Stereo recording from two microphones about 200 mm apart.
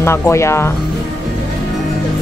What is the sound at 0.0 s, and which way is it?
Speech, 15° left (ahead or behind).